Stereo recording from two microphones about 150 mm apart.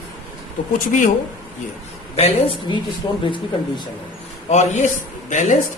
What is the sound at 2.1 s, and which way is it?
Speech, 40° left (ahead or behind).